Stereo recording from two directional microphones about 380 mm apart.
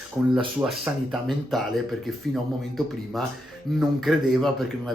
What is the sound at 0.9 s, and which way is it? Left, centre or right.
Speech, centre.